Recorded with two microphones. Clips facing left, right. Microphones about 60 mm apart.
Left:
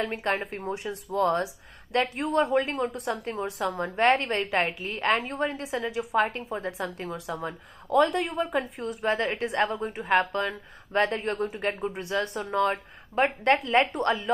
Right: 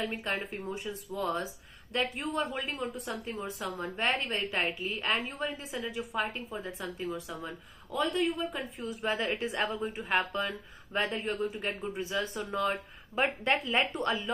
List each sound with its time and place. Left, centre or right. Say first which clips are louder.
0.0 s a woman's voice: left 6 dB; left
12.4 s a woman's voice: left 7 dB; left